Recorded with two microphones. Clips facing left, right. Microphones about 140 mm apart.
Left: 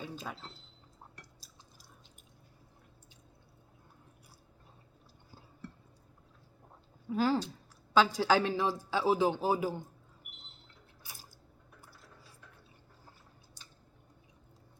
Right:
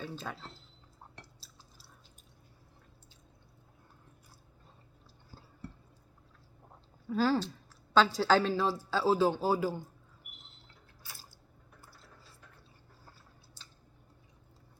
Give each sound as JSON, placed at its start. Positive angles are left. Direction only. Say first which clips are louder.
{"t": 0.0, "sound": "speech", "louder": "right 1 dB", "side_deg": 10}
{"t": 7.1, "sound": "speech", "louder": "right 1 dB", "side_deg": 15}
{"t": 11.0, "sound": "a sound", "louder": "right 1 dB", "side_deg": 15}